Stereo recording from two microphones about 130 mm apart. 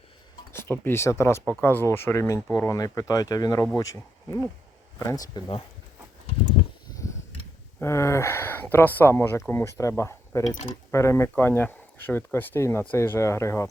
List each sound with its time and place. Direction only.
0.5 s speech: 15° left (ahead or behind)
7.8 s speech: 20° left (ahead or behind)